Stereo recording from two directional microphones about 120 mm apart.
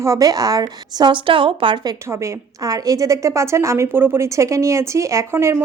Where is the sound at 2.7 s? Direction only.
30° right (ahead or behind).